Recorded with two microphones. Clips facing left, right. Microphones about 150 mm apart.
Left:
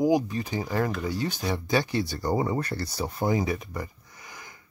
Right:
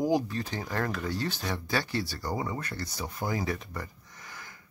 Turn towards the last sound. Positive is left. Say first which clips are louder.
# left 1 dB
turn(degrees=15)  # may be behind; listen again after turning